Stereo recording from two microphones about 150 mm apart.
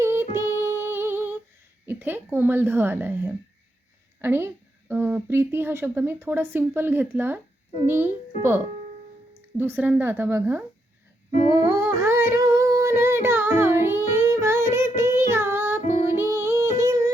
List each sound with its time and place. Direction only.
0.0 s singing: 15° right (ahead or behind)
1.9 s speech: 15° right (ahead or behind)
11.5 s a sound: 20° right (ahead or behind)